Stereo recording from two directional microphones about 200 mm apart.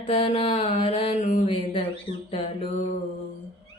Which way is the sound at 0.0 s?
25° left (ahead or behind).